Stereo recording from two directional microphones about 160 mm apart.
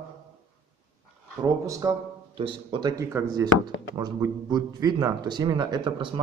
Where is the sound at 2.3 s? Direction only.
30° right (ahead or behind).